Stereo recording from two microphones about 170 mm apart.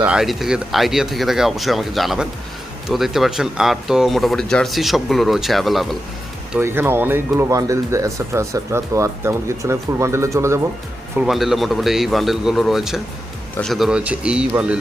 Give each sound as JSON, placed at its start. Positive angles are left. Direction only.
{"t": 0.0, "sound": "speech", "side_deg": -5}
{"t": 6.6, "sound": "speech", "side_deg": -15}
{"t": 11.2, "sound": "speech", "side_deg": 0}